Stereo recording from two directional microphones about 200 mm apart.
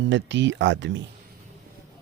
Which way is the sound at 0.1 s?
65° right (ahead or behind).